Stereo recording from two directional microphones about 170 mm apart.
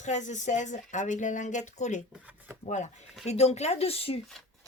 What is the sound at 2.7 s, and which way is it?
Speech, 45° left (ahead or behind).